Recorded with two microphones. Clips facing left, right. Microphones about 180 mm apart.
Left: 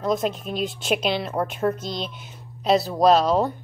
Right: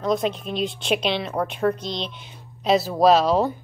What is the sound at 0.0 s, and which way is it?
A woman's voice, centre (ahead or behind).